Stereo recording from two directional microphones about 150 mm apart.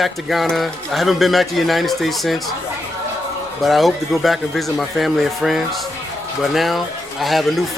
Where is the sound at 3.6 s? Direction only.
Centre (ahead or behind).